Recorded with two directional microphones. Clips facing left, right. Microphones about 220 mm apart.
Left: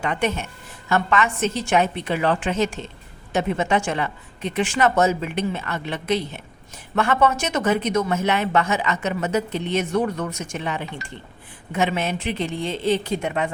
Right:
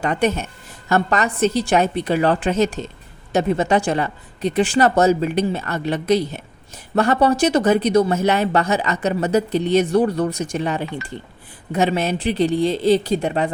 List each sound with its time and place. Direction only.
0.0 s speech: 40° right (ahead or behind)